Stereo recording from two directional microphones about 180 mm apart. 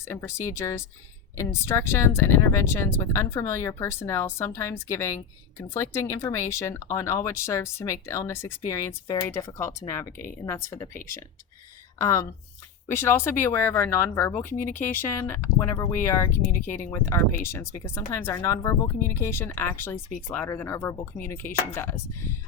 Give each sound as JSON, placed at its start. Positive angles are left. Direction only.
{"t": 0.1, "sound": "speech", "side_deg": 15}
{"t": 11.9, "sound": "speech", "side_deg": 15}
{"t": 17.4, "sound": "speech", "side_deg": 15}